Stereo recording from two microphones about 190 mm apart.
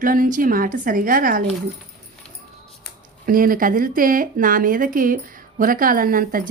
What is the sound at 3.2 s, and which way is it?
Speech, 45° right (ahead or behind).